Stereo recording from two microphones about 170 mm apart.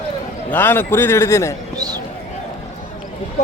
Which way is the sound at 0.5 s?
15° left (ahead or behind).